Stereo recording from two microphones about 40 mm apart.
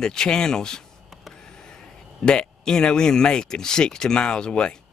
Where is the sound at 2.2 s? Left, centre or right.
Left.